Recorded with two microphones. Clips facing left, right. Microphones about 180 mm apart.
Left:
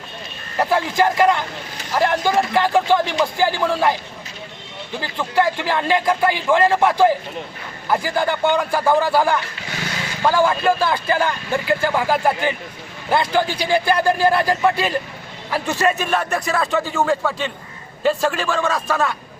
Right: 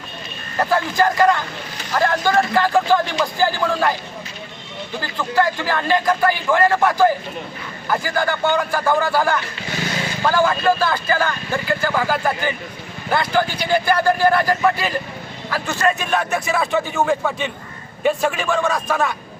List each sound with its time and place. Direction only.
0.6 s speech: 25° left (ahead or behind)
4.9 s speech: 25° left (ahead or behind)
10.6 s a man's voice: 25° left (ahead or behind)
15.8 s a man's voice: 5° left (ahead or behind)